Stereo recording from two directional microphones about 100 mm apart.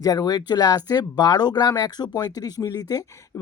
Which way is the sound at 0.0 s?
40° left (ahead or behind).